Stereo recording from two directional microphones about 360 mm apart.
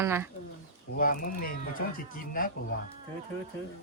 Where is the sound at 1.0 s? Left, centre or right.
Left.